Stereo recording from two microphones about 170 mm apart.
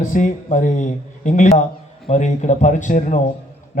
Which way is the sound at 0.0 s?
50° left (ahead or behind).